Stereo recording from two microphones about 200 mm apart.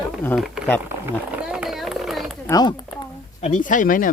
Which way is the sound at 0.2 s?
5° left (ahead or behind).